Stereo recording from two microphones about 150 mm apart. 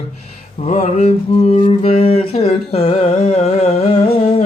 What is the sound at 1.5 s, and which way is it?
Humming, 45° left (ahead or behind).